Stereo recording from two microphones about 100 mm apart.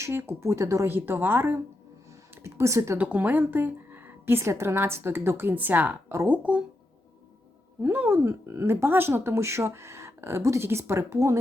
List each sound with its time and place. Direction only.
0.0 s a woman's voice: 25° right (ahead or behind)
3.0 s a woman's voice: 15° right (ahead or behind)
7.8 s a woman's voice: 20° right (ahead or behind)